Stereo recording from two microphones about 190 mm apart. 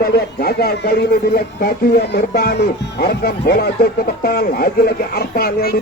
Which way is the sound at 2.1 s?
55° left (ahead or behind).